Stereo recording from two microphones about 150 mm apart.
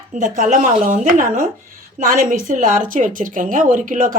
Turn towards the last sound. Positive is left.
turn(degrees=-60)  # may be behind; listen again after turning